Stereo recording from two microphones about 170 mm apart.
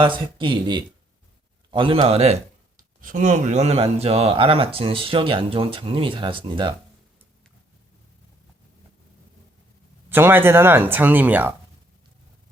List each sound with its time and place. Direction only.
0.0 s speech: 30° right (ahead or behind)
3.0 s speech: 50° right (ahead or behind); by 6.7 s 30° right (ahead or behind)
10.1 s speech: 10° right (ahead or behind)